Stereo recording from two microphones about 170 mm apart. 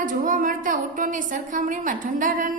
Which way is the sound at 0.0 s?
55° right (ahead or behind).